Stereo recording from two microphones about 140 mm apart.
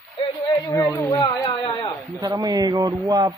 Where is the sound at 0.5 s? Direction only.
25° left (ahead or behind).